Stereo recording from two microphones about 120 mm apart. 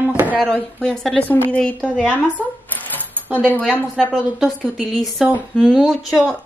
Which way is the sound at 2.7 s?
15° left (ahead or behind).